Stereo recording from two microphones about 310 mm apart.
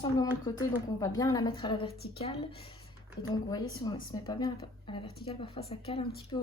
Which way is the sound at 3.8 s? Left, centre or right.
Centre.